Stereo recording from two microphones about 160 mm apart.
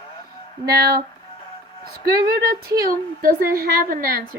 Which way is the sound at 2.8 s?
65° right (ahead or behind).